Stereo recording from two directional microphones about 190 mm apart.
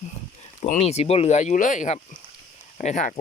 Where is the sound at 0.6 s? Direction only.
35° left (ahead or behind).